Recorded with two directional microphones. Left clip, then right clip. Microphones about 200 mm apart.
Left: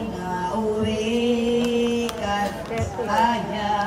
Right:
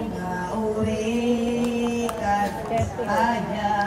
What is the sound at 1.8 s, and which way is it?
Music, centre (ahead or behind).